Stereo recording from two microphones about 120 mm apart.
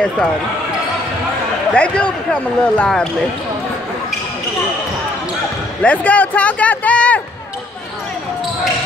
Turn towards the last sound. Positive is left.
turn(degrees=10)  # may be behind; listen again after turning